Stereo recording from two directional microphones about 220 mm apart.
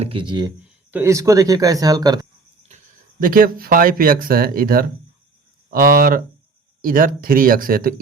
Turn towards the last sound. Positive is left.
turn(degrees=-40)  # may be behind; listen again after turning